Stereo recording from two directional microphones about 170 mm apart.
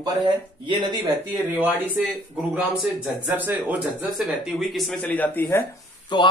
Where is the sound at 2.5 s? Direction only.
5° right (ahead or behind); by 5.6 s 10° left (ahead or behind).